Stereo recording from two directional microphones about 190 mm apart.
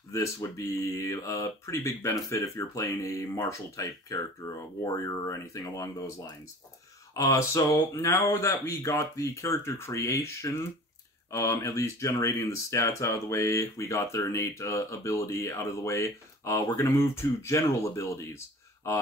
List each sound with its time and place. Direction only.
0.1 s speech: 15° left (ahead or behind)